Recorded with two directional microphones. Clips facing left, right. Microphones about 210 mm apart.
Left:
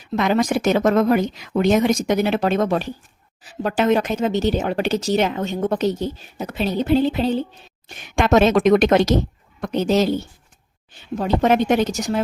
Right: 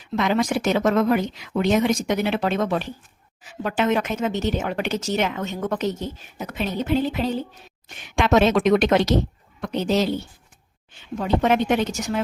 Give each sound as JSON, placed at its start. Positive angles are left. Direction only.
{"t": 0.2, "sound": "a woman's voice", "side_deg": 45}
{"t": 8.0, "sound": "a woman's voice", "side_deg": 45}